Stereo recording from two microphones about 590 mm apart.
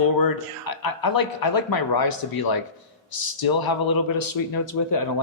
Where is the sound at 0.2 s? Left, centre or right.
Left.